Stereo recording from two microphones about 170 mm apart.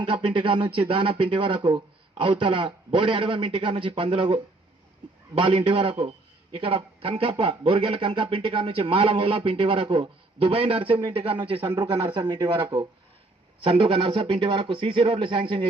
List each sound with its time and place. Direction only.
0.0 s a man's voice: 30° right (ahead or behind)